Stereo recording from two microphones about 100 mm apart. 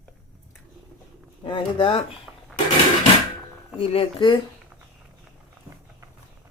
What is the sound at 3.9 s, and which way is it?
Speech, 60° left (ahead or behind).